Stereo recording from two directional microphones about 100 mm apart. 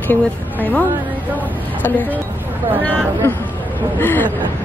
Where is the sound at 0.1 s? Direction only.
15° left (ahead or behind).